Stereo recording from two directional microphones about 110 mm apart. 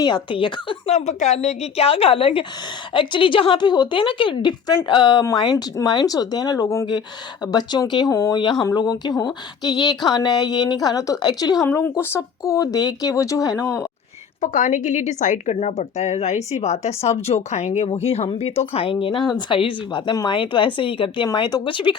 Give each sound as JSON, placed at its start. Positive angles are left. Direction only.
{"t": 0.0, "sound": "speech", "side_deg": 45}
{"t": 0.9, "sound": "a woman's voice", "side_deg": 90}
{"t": 8.1, "sound": "speech", "side_deg": 25}
{"t": 8.7, "sound": "speech", "side_deg": 40}
{"t": 11.6, "sound": "speech", "side_deg": 20}
{"t": 14.4, "sound": "a woman's voice", "side_deg": 90}